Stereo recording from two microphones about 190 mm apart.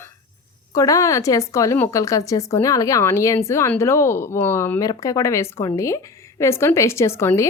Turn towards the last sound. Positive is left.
turn(degrees=15)  # may be behind; listen again after turning